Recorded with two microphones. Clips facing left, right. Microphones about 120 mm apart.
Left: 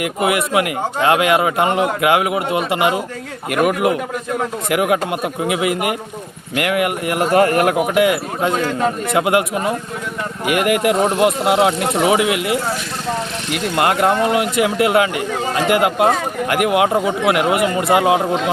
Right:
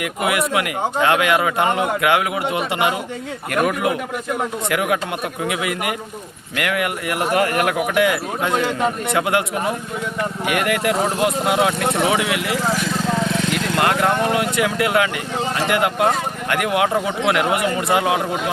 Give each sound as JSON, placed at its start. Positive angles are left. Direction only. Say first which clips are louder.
{"t": 0.0, "sound": "speech", "louder": "left 3 dB", "side_deg": 25}
{"t": 13.7, "sound": "speech", "louder": "left 4 dB", "side_deg": 20}